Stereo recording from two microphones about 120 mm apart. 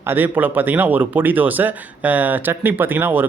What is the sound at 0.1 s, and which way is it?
Speech, 15° right (ahead or behind).